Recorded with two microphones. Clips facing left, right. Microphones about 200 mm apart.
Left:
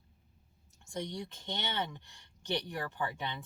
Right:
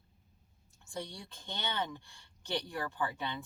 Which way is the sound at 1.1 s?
20° left (ahead or behind).